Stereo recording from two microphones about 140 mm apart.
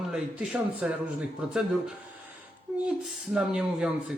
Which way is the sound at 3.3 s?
5° right (ahead or behind).